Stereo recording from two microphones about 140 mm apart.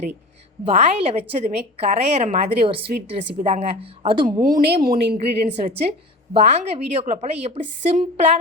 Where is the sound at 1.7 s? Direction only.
45° right (ahead or behind).